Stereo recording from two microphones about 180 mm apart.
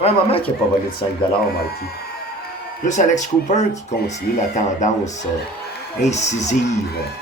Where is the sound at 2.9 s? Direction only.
40° left (ahead or behind).